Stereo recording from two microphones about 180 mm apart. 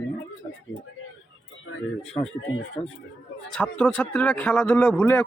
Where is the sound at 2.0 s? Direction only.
5° left (ahead or behind).